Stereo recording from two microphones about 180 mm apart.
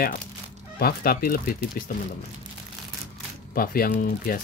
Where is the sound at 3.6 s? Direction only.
55° left (ahead or behind).